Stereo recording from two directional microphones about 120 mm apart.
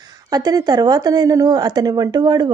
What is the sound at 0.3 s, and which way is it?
A woman's voice, 35° right (ahead or behind).